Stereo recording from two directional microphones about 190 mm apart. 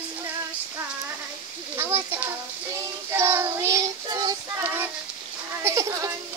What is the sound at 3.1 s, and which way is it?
Child singing, 10° right (ahead or behind).